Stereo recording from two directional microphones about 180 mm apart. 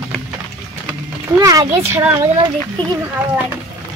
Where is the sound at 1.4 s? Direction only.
20° right (ahead or behind).